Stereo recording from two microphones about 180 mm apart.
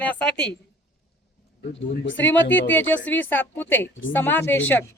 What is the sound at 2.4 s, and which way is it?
Speech, 90° left.